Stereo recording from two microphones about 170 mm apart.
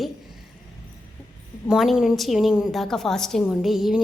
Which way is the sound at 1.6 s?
5° right (ahead or behind).